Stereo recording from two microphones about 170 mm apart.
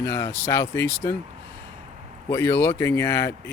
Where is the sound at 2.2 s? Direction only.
15° left (ahead or behind).